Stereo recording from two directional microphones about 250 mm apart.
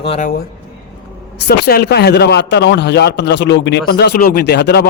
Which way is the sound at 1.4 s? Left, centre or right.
Left.